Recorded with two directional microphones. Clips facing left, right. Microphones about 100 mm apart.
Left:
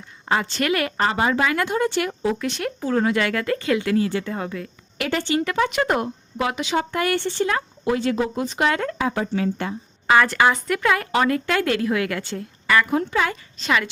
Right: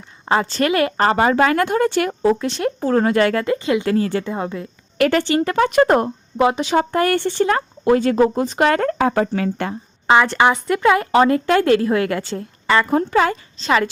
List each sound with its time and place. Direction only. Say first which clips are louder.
0.3 s a woman's voice: right 4 dB; 30° right (ahead or behind)
0.9 s speech: right 6 dB; 45° right (ahead or behind)
2.8 s a woman's voice: right 5 dB; 45° right (ahead or behind)
3.4 s speech: right 3 dB; 20° right (ahead or behind)
3.8 s a woman's voice: right 3 dB; 40° right (ahead or behind)
4.2 s speech: right 4 dB; 25° right (ahead or behind)
4.9 s speech: right 7 dB; 60° right (ahead or behind)
5.5 s a woman's voice: right 9 dB; 45° right (ahead or behind); by 9.7 s 60° right (ahead or behind)
10.1 s speech: right 3 dB; 25° right (ahead or behind)
12.9 s a woman's voice: right 5 dB; 40° right (ahead or behind)